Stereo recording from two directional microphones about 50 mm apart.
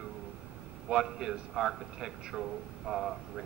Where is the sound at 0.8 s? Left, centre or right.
Centre.